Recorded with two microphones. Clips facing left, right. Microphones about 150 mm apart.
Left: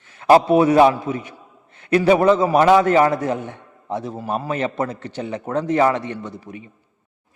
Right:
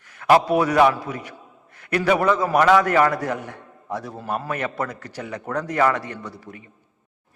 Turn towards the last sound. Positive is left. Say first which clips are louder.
# left 4 dB
turn(degrees=20)  # may be behind; listen again after turning